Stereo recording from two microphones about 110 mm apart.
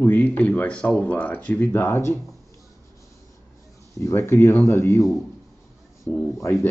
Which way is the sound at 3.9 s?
25° left (ahead or behind).